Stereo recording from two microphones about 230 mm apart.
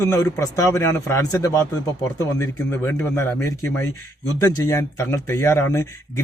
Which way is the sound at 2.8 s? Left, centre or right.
Centre.